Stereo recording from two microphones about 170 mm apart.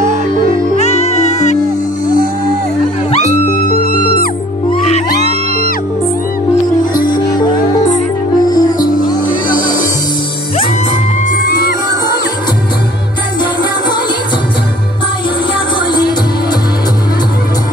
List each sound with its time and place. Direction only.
0.5 s music: 40° left (ahead or behind)
3.1 s music: 40° left (ahead or behind)
3.5 s music: 60° left (ahead or behind)
7.1 s music: 25° left (ahead or behind)
8.5 s music: 25° left (ahead or behind)
9.5 s music: 55° left (ahead or behind)